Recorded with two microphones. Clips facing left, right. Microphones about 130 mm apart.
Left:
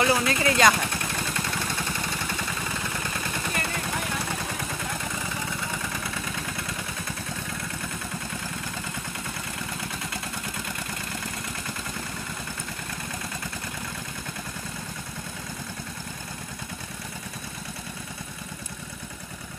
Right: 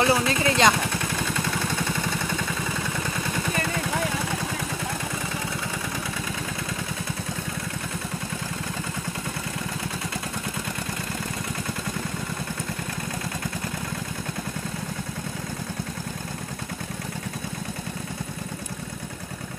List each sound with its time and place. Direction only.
0.0 s speech: 30° right (ahead or behind)